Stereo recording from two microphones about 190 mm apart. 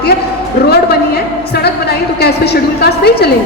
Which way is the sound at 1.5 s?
60° left (ahead or behind).